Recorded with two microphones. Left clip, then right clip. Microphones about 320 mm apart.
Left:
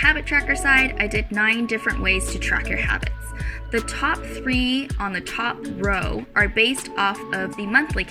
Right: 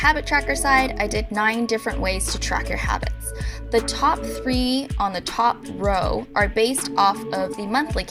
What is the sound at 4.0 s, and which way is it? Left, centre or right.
Speech, centre.